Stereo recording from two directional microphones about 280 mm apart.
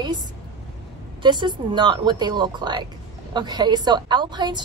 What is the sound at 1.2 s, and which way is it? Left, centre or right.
A woman's voice, centre.